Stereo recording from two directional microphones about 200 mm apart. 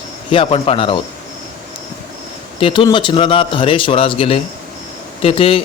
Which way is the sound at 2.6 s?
25° left (ahead or behind).